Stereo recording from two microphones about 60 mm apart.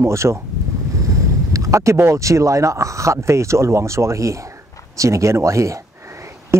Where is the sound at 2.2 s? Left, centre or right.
Right.